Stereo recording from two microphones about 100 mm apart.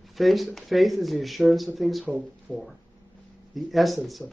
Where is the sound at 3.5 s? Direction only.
Centre (ahead or behind).